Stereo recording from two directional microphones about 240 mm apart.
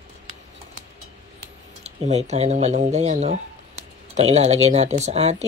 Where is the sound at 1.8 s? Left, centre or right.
Right.